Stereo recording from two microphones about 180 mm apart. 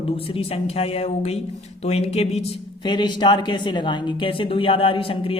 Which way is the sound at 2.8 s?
25° left (ahead or behind).